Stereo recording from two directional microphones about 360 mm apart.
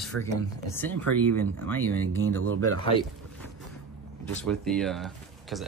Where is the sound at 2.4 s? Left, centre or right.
Right.